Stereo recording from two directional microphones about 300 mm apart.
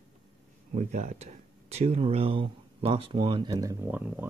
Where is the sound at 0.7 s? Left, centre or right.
Right.